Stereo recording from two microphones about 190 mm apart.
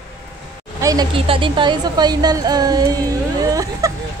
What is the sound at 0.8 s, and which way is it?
A woman's voice, 20° right (ahead or behind).